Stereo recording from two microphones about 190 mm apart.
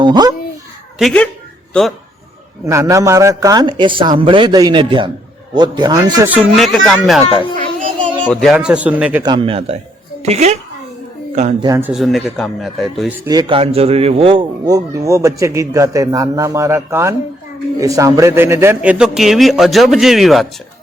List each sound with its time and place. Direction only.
0.0 s a man's voice: 20° right (ahead or behind)
0.9 s a man's voice: 5° left (ahead or behind)
2.6 s a man's voice: 15° right (ahead or behind)
6.3 s a man's voice: centre (ahead or behind)
8.0 s a sound: 5° left (ahead or behind)
8.5 s a man's voice: 5° right (ahead or behind)
9.2 s a man's voice: 25° right (ahead or behind)
11.6 s a man's voice: 15° right (ahead or behind)
11.9 s a man's voice: centre (ahead or behind)
13.1 s a man's voice: 20° right (ahead or behind); by 20.5 s centre (ahead or behind)